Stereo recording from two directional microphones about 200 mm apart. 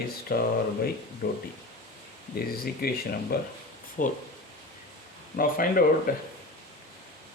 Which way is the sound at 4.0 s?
45° left (ahead or behind).